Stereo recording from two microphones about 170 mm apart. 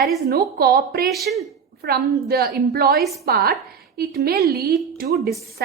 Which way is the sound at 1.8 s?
65° right (ahead or behind).